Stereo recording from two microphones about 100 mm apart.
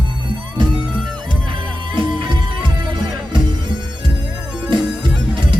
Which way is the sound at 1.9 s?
55° right (ahead or behind).